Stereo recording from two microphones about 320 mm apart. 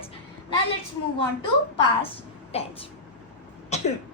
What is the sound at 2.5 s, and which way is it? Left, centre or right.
Speech, centre.